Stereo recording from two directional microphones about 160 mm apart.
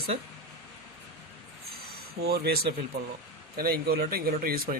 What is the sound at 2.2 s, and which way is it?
Speech, 80° right.